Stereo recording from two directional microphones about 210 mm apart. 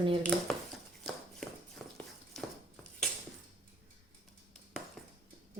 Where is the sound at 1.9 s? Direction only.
5° left (ahead or behind).